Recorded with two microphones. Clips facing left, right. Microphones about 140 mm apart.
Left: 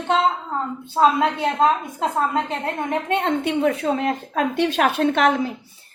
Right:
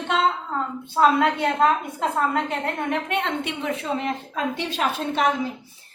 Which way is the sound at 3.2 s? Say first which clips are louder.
Left 7 dB; 45° left (ahead or behind).